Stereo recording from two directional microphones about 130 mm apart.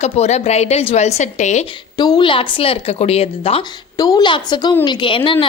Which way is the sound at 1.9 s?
30° left (ahead or behind).